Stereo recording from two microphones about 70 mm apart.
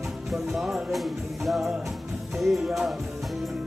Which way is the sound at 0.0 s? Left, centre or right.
Centre.